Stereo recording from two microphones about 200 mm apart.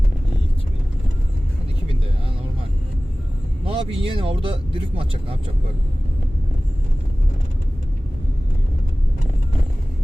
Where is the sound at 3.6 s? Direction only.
30° right (ahead or behind).